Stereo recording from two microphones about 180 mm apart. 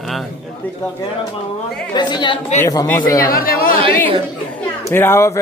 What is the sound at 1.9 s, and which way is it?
A man's voice, 25° left (ahead or behind).